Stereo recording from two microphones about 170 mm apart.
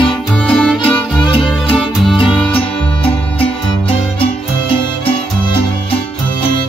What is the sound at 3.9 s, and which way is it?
Music, 30° left (ahead or behind).